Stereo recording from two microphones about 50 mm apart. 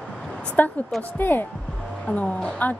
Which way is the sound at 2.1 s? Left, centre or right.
Left.